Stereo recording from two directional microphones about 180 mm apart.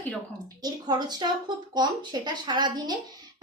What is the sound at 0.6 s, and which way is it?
Speech, 25° right (ahead or behind).